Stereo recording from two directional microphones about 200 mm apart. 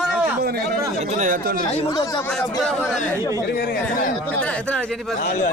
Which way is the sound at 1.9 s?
20° left (ahead or behind).